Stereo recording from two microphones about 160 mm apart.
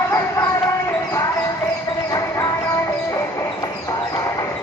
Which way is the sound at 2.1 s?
20° left (ahead or behind).